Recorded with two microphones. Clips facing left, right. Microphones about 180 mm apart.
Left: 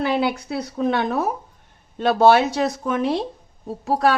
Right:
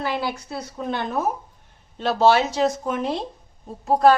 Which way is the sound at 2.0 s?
55° left (ahead or behind).